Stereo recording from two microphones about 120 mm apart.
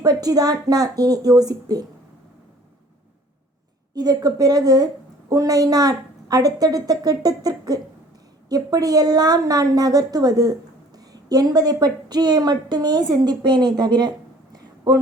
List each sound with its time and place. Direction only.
0.0 s a woman's voice: 35° right (ahead or behind)
3.9 s a woman's voice: 30° right (ahead or behind)